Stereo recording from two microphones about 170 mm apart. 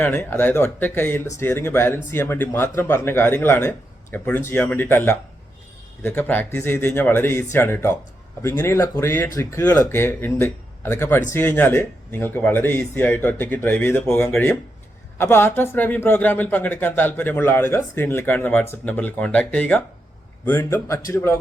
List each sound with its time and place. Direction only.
0.0 s speech: 10° left (ahead or behind)